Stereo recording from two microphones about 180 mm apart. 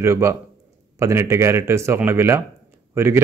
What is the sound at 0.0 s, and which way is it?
Speech, 15° right (ahead or behind).